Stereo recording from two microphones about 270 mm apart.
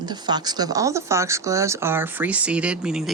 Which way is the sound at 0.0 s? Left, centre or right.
Centre.